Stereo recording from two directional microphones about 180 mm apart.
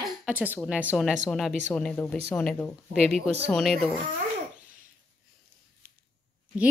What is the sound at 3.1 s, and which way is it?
Speech, 35° right (ahead or behind).